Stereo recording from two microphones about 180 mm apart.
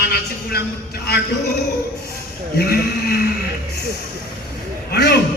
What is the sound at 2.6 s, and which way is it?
Speech, 60° left (ahead or behind).